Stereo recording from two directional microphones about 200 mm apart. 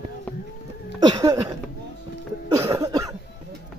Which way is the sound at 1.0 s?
20° right (ahead or behind).